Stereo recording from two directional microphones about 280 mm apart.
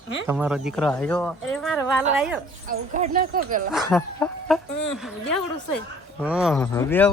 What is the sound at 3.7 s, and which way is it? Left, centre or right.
Speech, centre.